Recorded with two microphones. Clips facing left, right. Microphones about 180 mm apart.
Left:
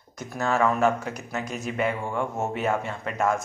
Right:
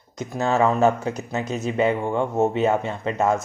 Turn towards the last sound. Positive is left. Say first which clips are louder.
# right 4 dB
turn(degrees=-20)  # may be behind; listen again after turning